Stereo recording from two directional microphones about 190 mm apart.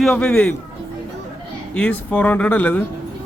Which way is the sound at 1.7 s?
5° left (ahead or behind).